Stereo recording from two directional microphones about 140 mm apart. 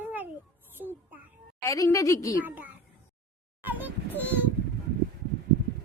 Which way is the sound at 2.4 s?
15° right (ahead or behind).